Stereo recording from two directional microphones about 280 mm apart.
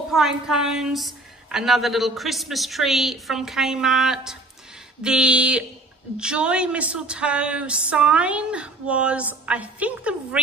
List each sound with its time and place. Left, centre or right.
0.1 s a woman's voice: centre